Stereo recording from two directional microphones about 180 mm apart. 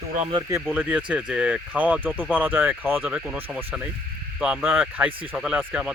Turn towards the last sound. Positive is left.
turn(degrees=-5)  # may be behind; listen again after turning